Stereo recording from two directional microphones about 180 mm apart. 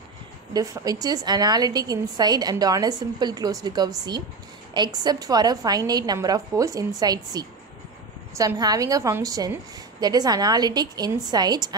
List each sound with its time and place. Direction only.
0.5 s a woman's voice: 20° right (ahead or behind)